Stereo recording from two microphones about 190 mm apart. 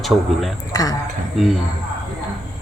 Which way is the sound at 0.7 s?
20° left (ahead or behind).